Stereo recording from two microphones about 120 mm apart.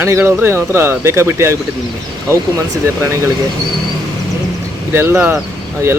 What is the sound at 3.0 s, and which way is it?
Speech, 25° right (ahead or behind).